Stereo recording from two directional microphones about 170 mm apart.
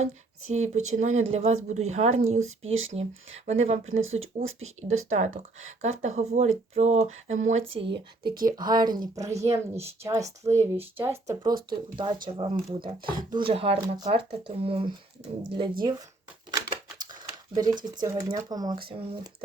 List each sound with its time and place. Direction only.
0.4 s speech: 45° right (ahead or behind)
7.7 s speech: 30° right (ahead or behind)
8.2 s speech: 65° right (ahead or behind)
8.4 s speech: 25° right (ahead or behind)
11.7 s speech: 25° right (ahead or behind)
15.8 s speech: 25° right (ahead or behind)
16.6 s typewriter: 25° right (ahead or behind)
18.0 s speech: 20° right (ahead or behind)